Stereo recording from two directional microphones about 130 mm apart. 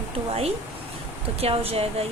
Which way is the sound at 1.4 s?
50° right (ahead or behind).